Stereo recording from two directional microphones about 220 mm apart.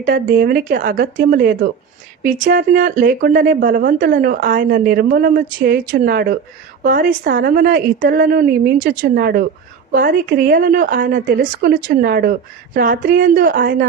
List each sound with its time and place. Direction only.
0.0 s speech: 45° right (ahead or behind)